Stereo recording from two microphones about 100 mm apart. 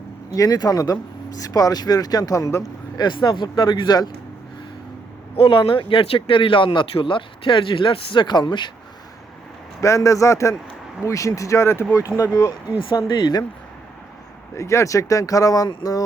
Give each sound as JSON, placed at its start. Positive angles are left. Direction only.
{"t": 0.3, "sound": "speech", "side_deg": 35}
{"t": 3.0, "sound": "speech", "side_deg": 45}
{"t": 5.4, "sound": "speech", "side_deg": 55}
{"t": 9.8, "sound": "speech", "side_deg": 30}
{"t": 13.1, "sound": "speech", "side_deg": 50}
{"t": 14.5, "sound": "speech", "side_deg": 30}